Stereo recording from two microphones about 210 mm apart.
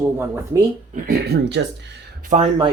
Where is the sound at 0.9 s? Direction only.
45° right (ahead or behind).